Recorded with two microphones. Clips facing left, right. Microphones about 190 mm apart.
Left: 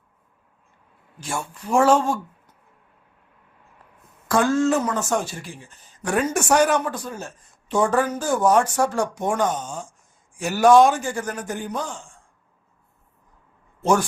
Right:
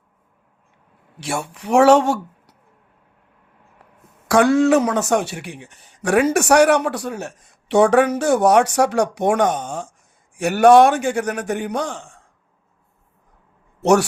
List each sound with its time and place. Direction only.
1.2 s speech: 75° right (ahead or behind)
4.3 s a man's voice: 75° right (ahead or behind)